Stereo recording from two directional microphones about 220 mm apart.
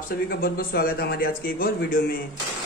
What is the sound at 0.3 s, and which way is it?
Speech, 40° left (ahead or behind).